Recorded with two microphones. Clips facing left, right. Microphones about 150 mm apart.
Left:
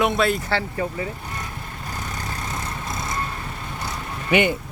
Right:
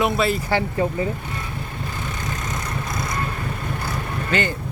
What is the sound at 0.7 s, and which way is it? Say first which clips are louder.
Speech: right 4 dB; 30° right (ahead or behind).